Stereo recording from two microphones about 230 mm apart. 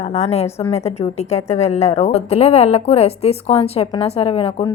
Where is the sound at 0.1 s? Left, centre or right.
Left.